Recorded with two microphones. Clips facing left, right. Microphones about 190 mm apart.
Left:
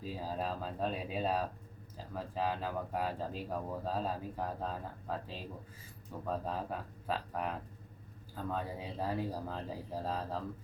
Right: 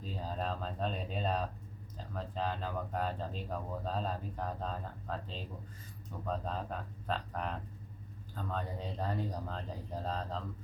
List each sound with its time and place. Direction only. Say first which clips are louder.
0.0 s speech: left 1 dB; 10° left (ahead or behind)